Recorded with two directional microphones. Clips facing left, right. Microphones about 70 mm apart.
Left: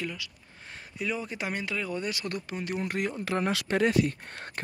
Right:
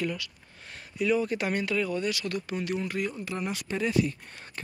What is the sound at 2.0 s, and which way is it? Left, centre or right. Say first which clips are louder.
Speech: right 3 dB; left.